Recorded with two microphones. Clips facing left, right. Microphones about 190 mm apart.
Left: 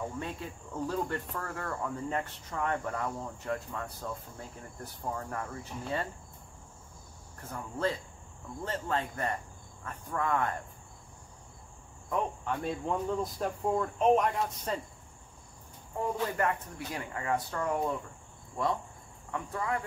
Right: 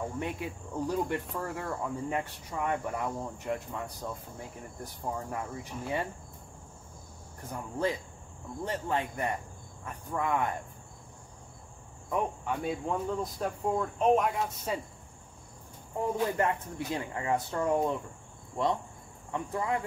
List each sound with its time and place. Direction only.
0.2 s speech: 15° right (ahead or behind)
7.5 s speech: 15° right (ahead or behind)
12.1 s speech: 10° right (ahead or behind)
16.2 s speech: 25° right (ahead or behind)
19.3 s speech: 20° right (ahead or behind)